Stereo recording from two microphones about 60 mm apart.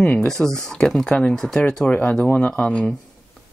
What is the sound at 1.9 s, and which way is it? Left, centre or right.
Speech, left.